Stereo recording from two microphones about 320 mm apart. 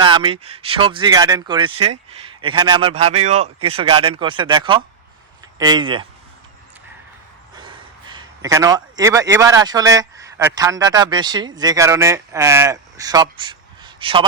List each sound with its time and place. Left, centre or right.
0.0 s speech: centre
8.1 s a man's voice: centre